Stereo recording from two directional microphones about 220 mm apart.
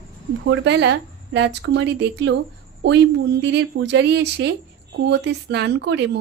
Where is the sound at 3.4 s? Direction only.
55° right (ahead or behind).